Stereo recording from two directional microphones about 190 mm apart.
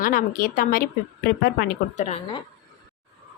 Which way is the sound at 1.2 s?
55° left (ahead or behind).